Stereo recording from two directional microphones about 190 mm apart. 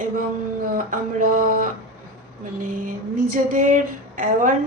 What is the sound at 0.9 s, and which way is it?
Speech, 45° right (ahead or behind).